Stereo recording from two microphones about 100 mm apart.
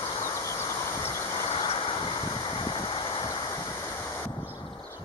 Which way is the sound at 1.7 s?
60° left (ahead or behind).